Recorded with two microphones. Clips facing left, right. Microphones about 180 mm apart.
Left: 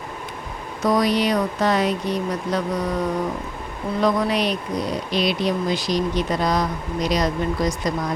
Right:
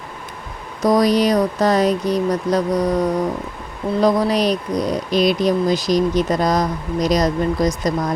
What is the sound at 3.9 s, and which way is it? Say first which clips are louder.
Speech: right 4 dB; 35° right (ahead or behind).